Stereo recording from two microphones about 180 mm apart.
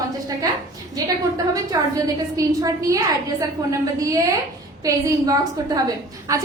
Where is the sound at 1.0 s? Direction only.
20° right (ahead or behind).